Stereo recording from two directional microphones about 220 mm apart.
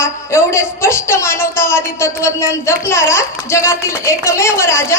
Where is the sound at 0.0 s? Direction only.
10° left (ahead or behind).